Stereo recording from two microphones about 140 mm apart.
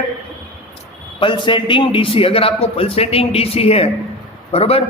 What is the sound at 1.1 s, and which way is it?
A man's voice, 35° left (ahead or behind).